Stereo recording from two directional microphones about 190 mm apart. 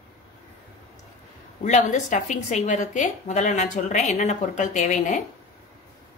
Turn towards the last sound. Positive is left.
turn(degrees=40)  # may be behind; listen again after turning